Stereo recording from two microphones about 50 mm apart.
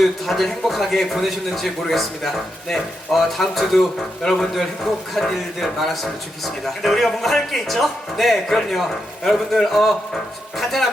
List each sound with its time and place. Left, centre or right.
0.0 s speech: centre